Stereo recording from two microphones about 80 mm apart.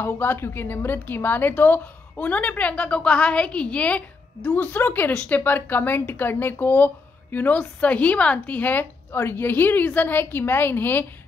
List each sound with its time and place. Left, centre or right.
0.0 s a woman's voice: left